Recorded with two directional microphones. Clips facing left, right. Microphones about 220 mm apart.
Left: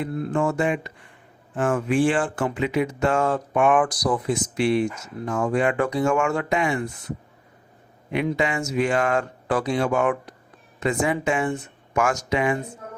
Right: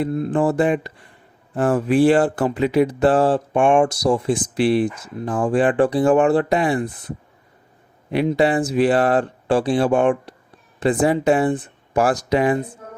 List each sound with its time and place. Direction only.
0.1 s speech: 25° right (ahead or behind)
0.3 s speech: 35° right (ahead or behind)
8.4 s speech: 35° right (ahead or behind)